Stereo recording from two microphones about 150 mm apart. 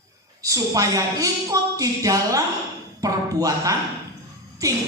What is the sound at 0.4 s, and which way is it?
A woman's voice, 20° right (ahead or behind).